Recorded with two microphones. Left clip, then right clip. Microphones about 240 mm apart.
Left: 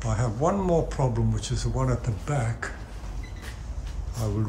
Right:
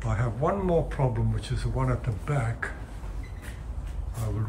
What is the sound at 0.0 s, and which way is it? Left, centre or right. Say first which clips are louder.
Speech: left 2 dB; centre.